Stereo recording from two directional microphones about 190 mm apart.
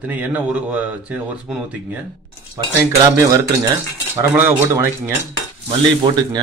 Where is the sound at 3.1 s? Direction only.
15° right (ahead or behind).